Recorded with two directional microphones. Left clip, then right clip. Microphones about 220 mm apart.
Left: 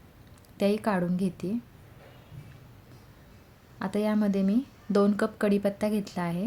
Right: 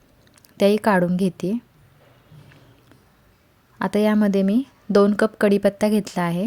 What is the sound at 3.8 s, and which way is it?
Speech, 35° right (ahead or behind).